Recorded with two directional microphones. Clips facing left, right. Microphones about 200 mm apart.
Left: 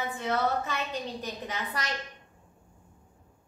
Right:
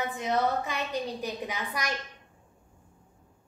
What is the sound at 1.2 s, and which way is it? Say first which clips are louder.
Speech: right 2 dB; 10° right (ahead or behind).